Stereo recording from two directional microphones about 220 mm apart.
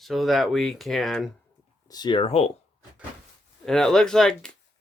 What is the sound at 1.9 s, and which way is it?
Speech, 20° left (ahead or behind).